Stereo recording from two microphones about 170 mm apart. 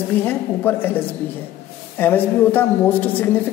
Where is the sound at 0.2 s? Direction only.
10° left (ahead or behind).